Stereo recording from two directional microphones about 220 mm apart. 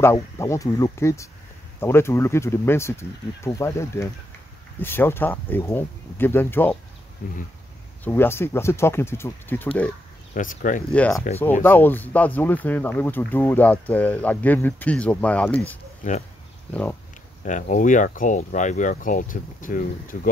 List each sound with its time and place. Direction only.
0.0 s speech: 15° left (ahead or behind)
7.2 s speech: 35° left (ahead or behind)
8.0 s speech: 10° left (ahead or behind)
10.3 s speech: 35° left (ahead or behind)
10.9 s speech: 5° left (ahead or behind)
16.0 s speech: 35° left (ahead or behind)
17.5 s speech: 35° left (ahead or behind)